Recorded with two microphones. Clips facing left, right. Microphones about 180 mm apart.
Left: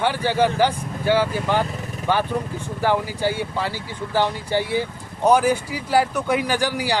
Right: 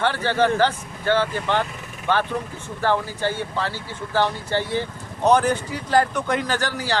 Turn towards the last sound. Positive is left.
turn(degrees=10)  # may be behind; listen again after turning